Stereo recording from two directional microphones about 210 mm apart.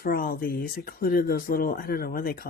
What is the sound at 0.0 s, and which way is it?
Speech, 45° left (ahead or behind).